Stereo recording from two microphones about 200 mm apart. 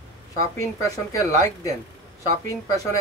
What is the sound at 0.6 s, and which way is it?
Speech, 15° left (ahead or behind).